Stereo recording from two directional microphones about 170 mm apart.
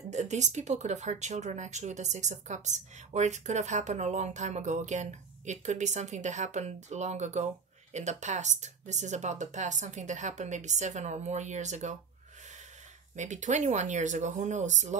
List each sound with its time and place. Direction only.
0.1 s speech: 45° right (ahead or behind)
13.1 s speech: 45° right (ahead or behind)